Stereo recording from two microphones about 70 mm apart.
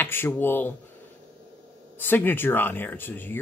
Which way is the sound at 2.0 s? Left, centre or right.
Left.